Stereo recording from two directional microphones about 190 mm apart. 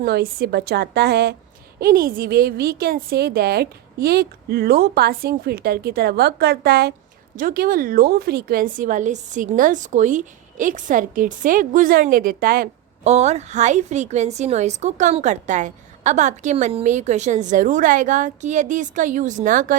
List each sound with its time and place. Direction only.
0.0 s a woman's voice: 55° right (ahead or behind)
13.1 s a woman's voice: 35° right (ahead or behind)